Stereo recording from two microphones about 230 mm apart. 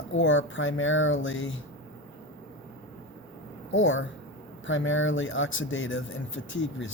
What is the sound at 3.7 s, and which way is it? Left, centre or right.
Speech, left.